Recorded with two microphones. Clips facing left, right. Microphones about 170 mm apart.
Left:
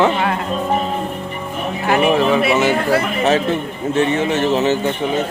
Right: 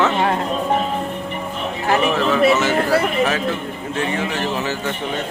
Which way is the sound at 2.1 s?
15° left (ahead or behind).